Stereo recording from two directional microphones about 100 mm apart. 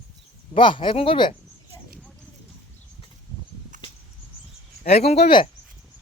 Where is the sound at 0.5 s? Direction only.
55° left (ahead or behind).